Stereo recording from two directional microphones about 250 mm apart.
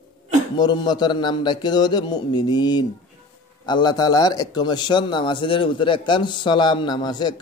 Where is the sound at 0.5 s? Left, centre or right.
Centre.